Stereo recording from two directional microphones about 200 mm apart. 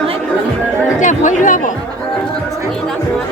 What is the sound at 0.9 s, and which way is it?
Chatter, 40° left (ahead or behind).